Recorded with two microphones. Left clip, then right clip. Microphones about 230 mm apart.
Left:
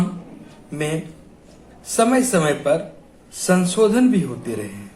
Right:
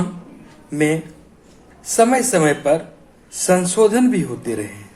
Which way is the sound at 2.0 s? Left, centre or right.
Right.